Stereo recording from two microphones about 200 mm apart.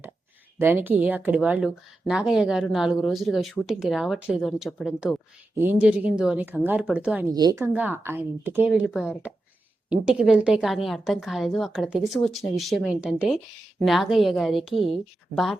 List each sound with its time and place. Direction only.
0.6 s a woman's voice: 10° right (ahead or behind)
7.3 s a woman's voice: 20° right (ahead or behind)
7.6 s a woman's voice: 10° right (ahead or behind)